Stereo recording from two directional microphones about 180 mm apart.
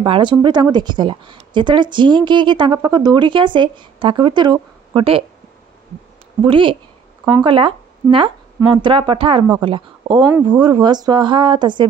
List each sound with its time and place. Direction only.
0.0 s speech: 30° right (ahead or behind)
6.4 s speech: 30° right (ahead or behind)